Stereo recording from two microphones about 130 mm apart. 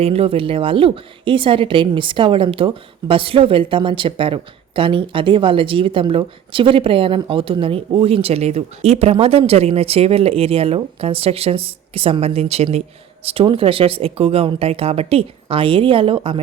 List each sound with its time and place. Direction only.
0.0 s a woman's voice: 50° right (ahead or behind)